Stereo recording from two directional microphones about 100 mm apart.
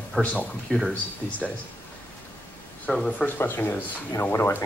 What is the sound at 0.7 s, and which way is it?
Speech, 5° right (ahead or behind).